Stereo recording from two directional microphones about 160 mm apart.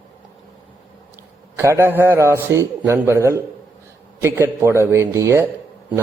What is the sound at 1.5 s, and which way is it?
A man's voice, 15° right (ahead or behind).